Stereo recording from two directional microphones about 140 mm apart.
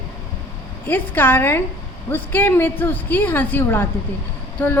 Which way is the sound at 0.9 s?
15° left (ahead or behind).